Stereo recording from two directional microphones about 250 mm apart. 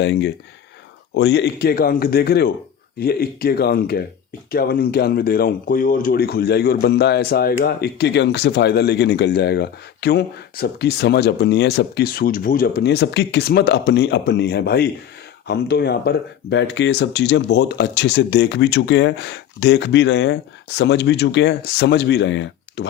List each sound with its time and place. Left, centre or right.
0.0 s speech: left